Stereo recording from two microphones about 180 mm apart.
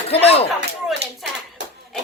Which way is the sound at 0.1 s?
35° left (ahead or behind).